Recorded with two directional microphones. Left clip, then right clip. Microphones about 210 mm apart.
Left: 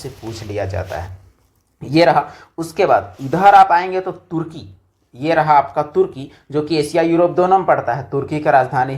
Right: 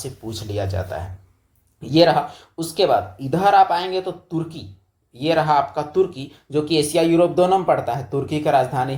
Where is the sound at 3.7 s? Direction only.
5° right (ahead or behind).